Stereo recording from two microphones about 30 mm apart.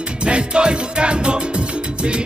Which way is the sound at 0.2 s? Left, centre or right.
Right.